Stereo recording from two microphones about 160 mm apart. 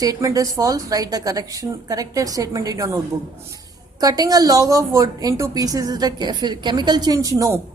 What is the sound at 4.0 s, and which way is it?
A woman's voice, 25° right (ahead or behind).